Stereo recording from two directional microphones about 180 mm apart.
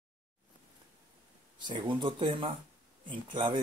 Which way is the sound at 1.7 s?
25° right (ahead or behind).